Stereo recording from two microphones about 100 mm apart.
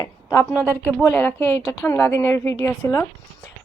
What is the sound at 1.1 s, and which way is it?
A woman's voice, 20° left (ahead or behind).